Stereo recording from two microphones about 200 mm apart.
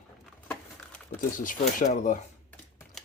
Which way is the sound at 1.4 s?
40° left (ahead or behind).